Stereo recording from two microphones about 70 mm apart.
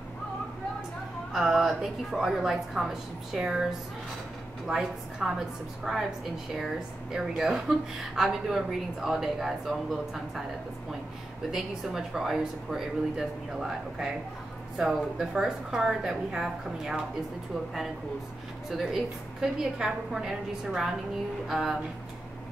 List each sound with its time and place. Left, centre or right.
1.3 s a woman's voice: centre
4.6 s a woman's voice: centre
6.5 s a woman's voice: centre
11.5 s a woman's voice: centre
18.7 s a woman's voice: centre